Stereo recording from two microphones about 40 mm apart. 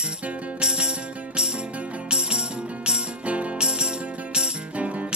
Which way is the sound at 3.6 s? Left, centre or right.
Right.